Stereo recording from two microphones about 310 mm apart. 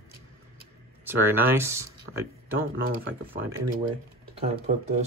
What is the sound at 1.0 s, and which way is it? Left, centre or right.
Speech, centre.